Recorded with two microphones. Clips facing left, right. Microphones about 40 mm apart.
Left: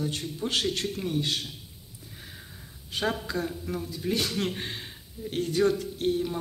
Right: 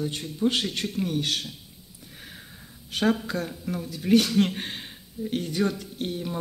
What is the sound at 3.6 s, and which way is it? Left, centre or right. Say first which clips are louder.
Speech: right 2 dB; right.